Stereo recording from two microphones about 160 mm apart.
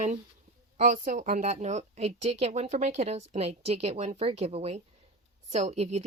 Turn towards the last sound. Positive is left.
turn(degrees=-45)  # may be behind; listen again after turning